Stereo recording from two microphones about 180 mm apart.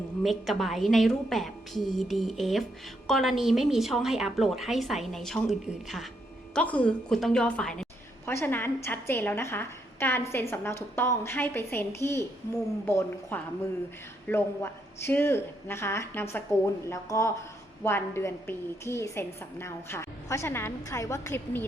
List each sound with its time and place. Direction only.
0.2 s a woman's voice: centre (ahead or behind)